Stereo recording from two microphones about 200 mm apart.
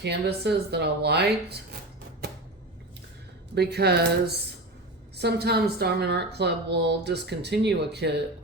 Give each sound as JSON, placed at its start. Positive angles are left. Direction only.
{"t": 0.0, "sound": "a woman's voice", "side_deg": -55}
{"t": 3.5, "sound": "a woman's voice", "side_deg": -55}